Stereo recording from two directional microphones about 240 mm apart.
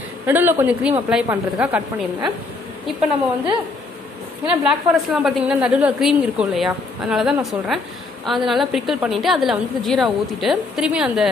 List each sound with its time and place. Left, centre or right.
0.3 s a woman's voice: centre
4.5 s a woman's voice: centre